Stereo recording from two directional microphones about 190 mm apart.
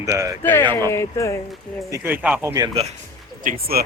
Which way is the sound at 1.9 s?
10° right (ahead or behind).